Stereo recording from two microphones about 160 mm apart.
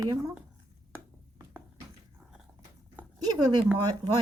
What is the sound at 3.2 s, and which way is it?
Speech, 25° right (ahead or behind).